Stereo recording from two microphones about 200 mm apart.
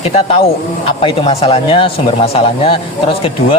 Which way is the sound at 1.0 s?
30° left (ahead or behind).